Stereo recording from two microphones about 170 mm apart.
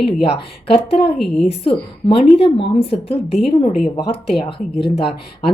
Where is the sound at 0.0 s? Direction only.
35° left (ahead or behind).